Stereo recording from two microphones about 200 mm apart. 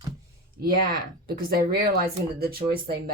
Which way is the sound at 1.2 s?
45° right (ahead or behind).